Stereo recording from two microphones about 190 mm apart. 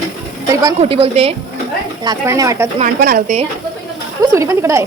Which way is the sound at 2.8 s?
50° right (ahead or behind).